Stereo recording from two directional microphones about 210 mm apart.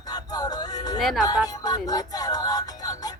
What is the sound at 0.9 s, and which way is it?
Speech, centre (ahead or behind).